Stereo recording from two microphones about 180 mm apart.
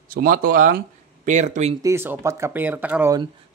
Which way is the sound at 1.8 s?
15° right (ahead or behind).